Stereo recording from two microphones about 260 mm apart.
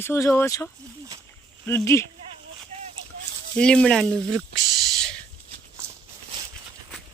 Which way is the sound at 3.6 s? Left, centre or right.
Centre.